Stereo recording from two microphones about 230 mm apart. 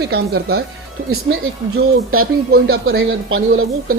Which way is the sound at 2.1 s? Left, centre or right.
Right.